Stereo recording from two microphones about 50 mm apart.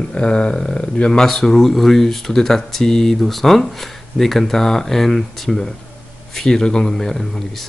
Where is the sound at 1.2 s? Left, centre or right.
Centre.